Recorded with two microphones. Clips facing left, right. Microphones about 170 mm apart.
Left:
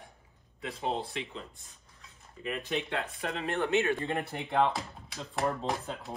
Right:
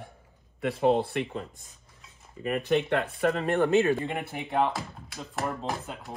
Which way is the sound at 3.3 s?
40° right (ahead or behind).